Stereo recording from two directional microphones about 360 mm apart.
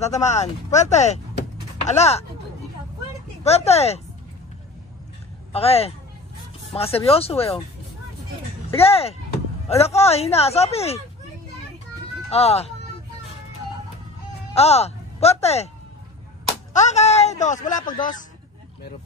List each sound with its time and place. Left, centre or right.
0.0 s speech: centre
3.4 s speech: centre
5.5 s speech: centre
8.6 s speech: centre
12.3 s speech: centre
14.5 s speech: centre